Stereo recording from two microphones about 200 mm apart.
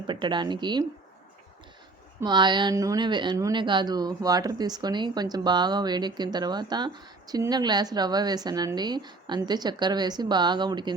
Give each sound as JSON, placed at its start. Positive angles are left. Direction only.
{"t": 0.1, "sound": "speech", "side_deg": -25}
{"t": 2.2, "sound": "speech", "side_deg": -20}